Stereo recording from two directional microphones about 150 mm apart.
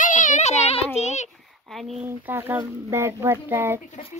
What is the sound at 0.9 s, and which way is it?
Speech, 50° left (ahead or behind).